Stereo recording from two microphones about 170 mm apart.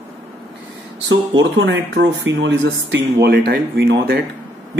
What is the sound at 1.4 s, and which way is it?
Speech, 90° right.